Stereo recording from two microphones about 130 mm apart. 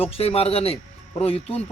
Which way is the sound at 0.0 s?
50° left (ahead or behind).